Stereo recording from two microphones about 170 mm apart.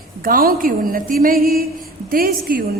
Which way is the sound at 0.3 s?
60° right (ahead or behind).